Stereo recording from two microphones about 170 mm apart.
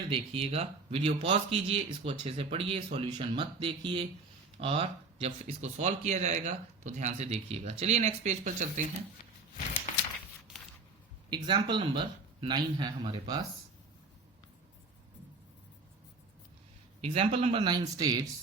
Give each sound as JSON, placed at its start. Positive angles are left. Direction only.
{"t": 0.1, "sound": "a man's voice", "side_deg": -35}
{"t": 10.5, "sound": "a sound", "side_deg": 0}
{"t": 11.3, "sound": "a man's voice", "side_deg": -30}
{"t": 17.0, "sound": "a man's voice", "side_deg": -35}